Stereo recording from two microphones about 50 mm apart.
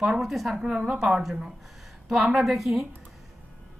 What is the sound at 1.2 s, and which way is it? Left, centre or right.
A woman's voice, centre.